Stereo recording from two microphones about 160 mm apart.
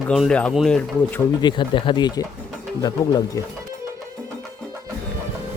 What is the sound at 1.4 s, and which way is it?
Speech, 30° left (ahead or behind).